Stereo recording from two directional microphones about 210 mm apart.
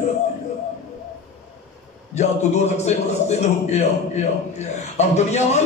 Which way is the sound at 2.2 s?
30° left (ahead or behind).